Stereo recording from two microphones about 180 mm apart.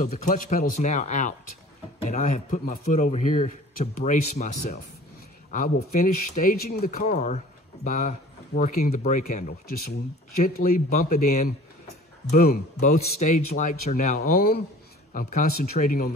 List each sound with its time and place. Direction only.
0.0 s speech: 45° left (ahead or behind)
15.1 s speech: 45° left (ahead or behind)